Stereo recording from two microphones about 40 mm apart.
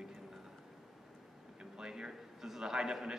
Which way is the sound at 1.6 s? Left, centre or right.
Centre.